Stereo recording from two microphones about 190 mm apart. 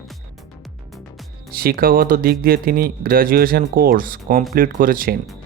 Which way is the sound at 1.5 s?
50° right (ahead or behind).